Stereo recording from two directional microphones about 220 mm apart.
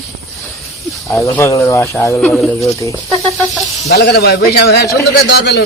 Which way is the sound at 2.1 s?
Centre (ahead or behind).